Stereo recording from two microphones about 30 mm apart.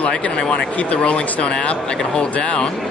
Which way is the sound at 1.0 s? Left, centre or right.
Left.